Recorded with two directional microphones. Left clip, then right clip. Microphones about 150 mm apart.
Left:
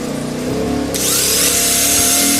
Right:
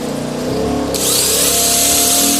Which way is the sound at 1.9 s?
10° left (ahead or behind).